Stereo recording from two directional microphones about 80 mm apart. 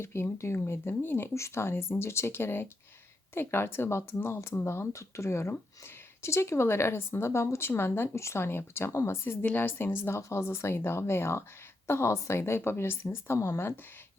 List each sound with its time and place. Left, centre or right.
0.0 s a woman's voice: left